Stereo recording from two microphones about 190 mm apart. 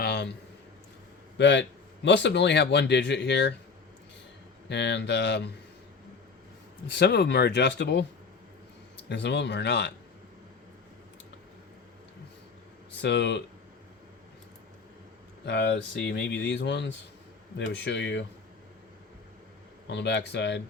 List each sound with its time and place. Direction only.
0.0 s a sound: 60° left (ahead or behind)
1.4 s speech: 65° left (ahead or behind)
4.7 s speech: 65° left (ahead or behind)
6.8 s speech: 60° left (ahead or behind)
13.0 s speech: 65° left (ahead or behind)
15.4 s speech: 65° left (ahead or behind)
19.9 s speech: 65° left (ahead or behind)